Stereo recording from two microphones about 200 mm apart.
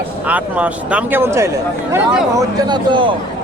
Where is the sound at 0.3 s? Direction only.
5° right (ahead or behind).